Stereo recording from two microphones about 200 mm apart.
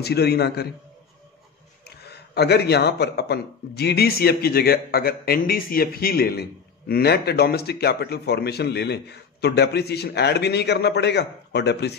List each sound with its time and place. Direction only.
0.0 s a man's voice: 55° left (ahead or behind)
1.9 s a man's voice: 55° left (ahead or behind)